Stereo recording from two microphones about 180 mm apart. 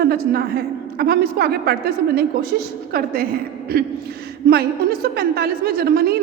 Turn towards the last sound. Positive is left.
turn(degrees=-60)  # may be behind; listen again after turning